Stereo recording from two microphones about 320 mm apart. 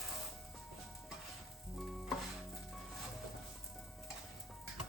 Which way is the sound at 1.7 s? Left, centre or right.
Centre.